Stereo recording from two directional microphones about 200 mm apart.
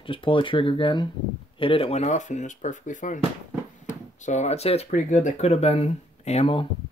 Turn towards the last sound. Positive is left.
turn(degrees=30)  # may be behind; listen again after turning